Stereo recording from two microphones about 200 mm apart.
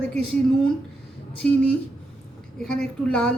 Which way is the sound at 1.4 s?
Centre (ahead or behind).